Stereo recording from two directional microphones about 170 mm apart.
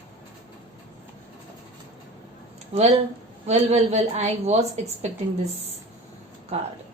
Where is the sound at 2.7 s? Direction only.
40° right (ahead or behind).